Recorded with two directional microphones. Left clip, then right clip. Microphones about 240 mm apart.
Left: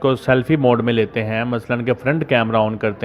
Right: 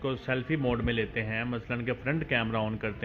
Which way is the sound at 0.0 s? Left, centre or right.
Left.